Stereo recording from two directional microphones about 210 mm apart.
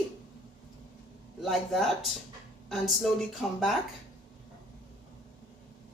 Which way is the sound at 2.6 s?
Centre (ahead or behind).